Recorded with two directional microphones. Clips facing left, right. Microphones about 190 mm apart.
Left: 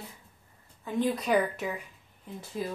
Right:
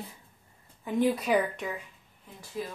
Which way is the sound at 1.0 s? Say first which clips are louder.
Right 1 dB; 5° right (ahead or behind).